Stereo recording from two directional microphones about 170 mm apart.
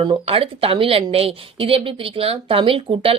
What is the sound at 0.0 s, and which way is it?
A woman's voice, 35° right (ahead or behind).